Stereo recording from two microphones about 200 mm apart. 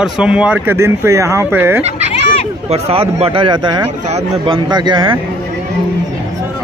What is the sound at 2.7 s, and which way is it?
Speech, 30° right (ahead or behind).